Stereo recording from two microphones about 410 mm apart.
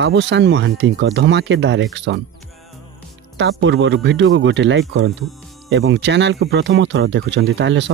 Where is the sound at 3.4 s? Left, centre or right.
Right.